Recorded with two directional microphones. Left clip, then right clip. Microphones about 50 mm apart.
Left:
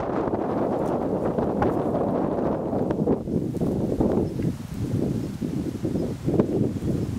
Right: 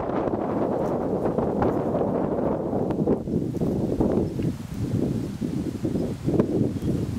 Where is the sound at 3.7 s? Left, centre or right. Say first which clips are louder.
Even; centre.